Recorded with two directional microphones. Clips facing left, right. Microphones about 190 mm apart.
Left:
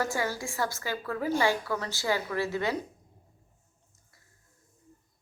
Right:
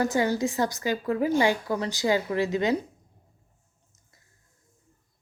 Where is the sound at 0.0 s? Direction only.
20° right (ahead or behind).